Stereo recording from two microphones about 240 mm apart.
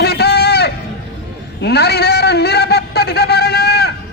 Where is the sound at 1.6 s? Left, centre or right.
Left.